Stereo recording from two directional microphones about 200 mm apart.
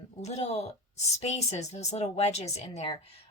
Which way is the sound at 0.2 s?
35° left (ahead or behind).